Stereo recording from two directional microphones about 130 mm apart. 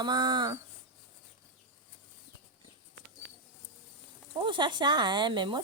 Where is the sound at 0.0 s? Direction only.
35° right (ahead or behind).